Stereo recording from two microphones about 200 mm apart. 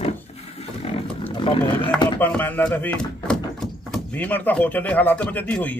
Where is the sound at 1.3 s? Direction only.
25° left (ahead or behind).